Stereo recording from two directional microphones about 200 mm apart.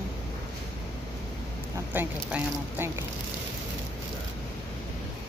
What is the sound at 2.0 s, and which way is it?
Speech, 10° right (ahead or behind).